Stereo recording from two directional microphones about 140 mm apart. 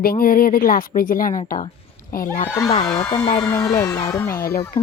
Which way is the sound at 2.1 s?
90° left.